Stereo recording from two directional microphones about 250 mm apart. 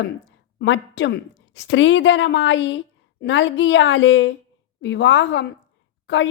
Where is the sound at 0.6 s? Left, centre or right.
Left.